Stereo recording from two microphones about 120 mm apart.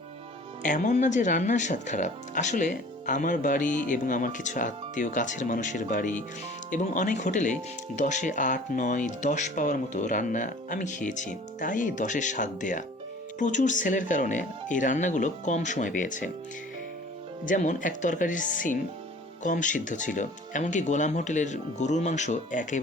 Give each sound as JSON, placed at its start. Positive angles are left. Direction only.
{"t": 0.6, "sound": "speech", "side_deg": 90}
{"t": 17.4, "sound": "speech", "side_deg": 90}